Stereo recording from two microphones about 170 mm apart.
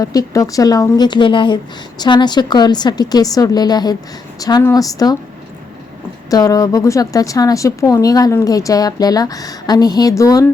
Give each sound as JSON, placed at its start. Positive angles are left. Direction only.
{"t": 0.0, "sound": "speech", "side_deg": 20}
{"t": 6.3, "sound": "speech", "side_deg": 20}